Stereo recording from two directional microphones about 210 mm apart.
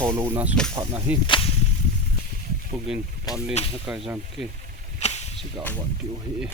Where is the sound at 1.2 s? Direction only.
25° left (ahead or behind).